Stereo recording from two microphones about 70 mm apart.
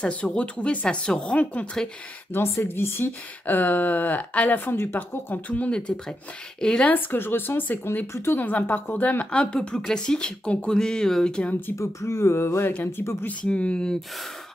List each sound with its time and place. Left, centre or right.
0.0 s speech: centre
2.3 s speech: left; by 6.9 s centre
6.9 s speech: left; by 11.5 s centre
11.7 s speech: left
13.2 s speech: centre